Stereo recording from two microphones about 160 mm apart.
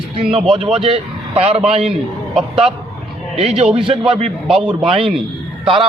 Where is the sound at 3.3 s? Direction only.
40° right (ahead or behind).